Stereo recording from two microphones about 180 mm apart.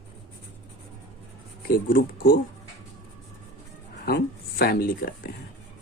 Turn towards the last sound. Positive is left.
turn(degrees=55)  # may be behind; listen again after turning